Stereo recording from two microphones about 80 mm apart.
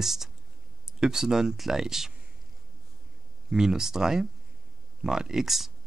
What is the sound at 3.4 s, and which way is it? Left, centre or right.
Speech, centre.